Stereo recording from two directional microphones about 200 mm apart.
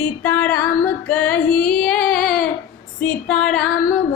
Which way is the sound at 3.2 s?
5° left (ahead or behind).